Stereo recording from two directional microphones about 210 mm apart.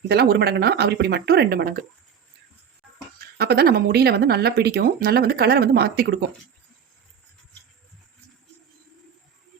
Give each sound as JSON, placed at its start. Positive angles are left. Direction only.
{"t": 0.1, "sound": "speech", "side_deg": -50}
{"t": 3.3, "sound": "speech", "side_deg": -50}